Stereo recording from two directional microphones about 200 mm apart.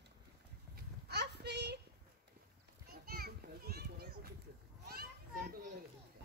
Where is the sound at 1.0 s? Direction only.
55° right (ahead or behind).